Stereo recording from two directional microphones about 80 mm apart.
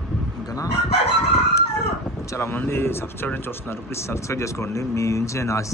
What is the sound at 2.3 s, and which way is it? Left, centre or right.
Speech, left.